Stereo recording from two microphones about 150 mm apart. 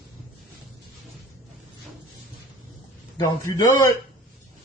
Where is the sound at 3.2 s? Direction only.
25° left (ahead or behind).